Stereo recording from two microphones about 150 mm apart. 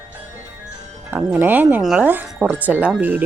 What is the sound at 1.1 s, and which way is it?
Speech, 10° right (ahead or behind).